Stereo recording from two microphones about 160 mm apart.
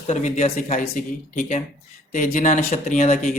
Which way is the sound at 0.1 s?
50° left (ahead or behind).